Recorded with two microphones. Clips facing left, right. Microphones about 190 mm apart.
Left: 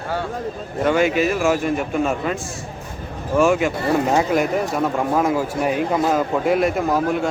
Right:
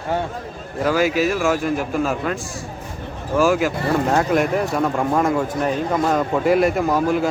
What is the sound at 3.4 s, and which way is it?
Speech, centre (ahead or behind).